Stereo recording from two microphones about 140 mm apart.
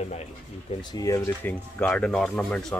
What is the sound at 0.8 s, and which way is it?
Speech, 25° left (ahead or behind).